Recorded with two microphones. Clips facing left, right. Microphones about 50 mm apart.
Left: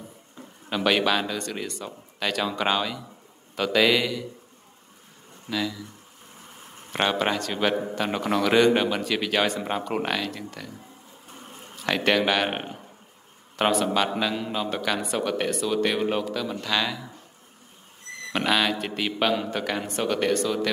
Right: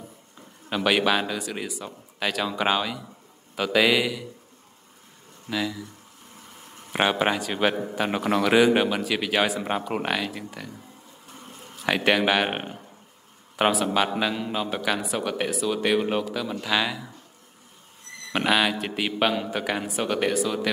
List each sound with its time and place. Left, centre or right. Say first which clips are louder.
0.7 s speech: even; centre
5.5 s speech: even; centre
6.9 s speech: right 1 dB; centre
11.3 s a sound: even; left
11.7 s a man's voice: right 1 dB; centre
18.3 s speech: right 1 dB; centre